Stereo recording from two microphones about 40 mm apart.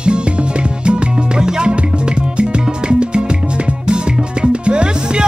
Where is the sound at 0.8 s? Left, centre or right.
Right.